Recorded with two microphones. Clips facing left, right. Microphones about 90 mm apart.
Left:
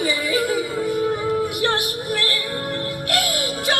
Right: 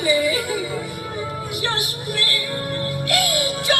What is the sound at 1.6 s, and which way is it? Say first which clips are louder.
Music: left 4 dB; 50° left (ahead or behind).